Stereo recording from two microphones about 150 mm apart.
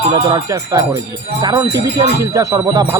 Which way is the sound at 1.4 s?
30° right (ahead or behind).